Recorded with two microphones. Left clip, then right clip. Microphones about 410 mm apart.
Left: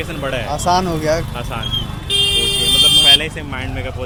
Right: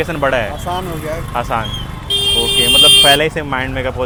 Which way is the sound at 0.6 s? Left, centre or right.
Left.